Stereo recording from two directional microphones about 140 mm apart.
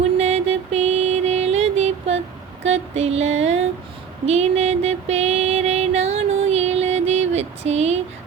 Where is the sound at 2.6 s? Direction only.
50° right (ahead or behind).